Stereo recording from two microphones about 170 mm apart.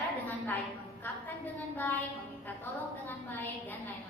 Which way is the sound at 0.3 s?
10° left (ahead or behind).